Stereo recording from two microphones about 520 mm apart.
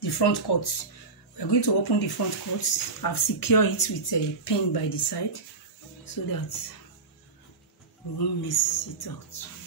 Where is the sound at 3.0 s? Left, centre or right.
Left.